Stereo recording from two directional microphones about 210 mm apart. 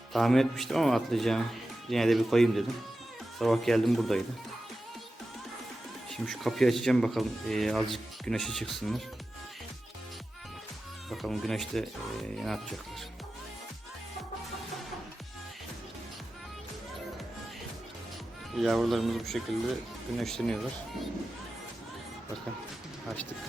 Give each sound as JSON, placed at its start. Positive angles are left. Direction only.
{"t": 0.1, "sound": "speech", "side_deg": 0}
{"t": 6.1, "sound": "speech", "side_deg": 0}
{"t": 11.1, "sound": "speech", "side_deg": 0}
{"t": 18.5, "sound": "speech", "side_deg": 0}